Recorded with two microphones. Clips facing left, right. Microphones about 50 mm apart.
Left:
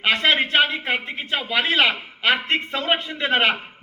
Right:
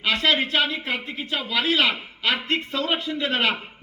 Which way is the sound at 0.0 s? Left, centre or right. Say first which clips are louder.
Left 2 dB; left.